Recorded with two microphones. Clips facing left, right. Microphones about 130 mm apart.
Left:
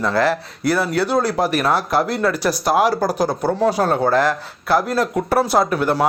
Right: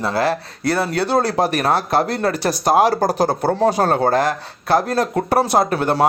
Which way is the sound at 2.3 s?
25° right (ahead or behind).